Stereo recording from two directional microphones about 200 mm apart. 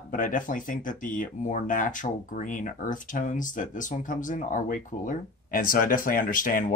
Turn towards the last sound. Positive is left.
turn(degrees=45)  # may be behind; listen again after turning